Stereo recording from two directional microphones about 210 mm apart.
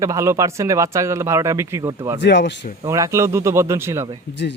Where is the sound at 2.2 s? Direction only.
55° left (ahead or behind).